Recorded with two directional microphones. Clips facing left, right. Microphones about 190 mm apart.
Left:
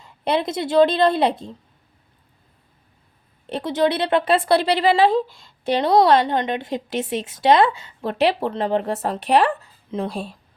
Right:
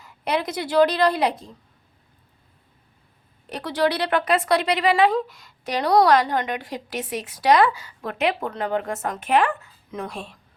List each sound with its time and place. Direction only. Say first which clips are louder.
0.0 s speech: left 3 dB; 25° left (ahead or behind)
3.5 s speech: left 3 dB; 25° left (ahead or behind)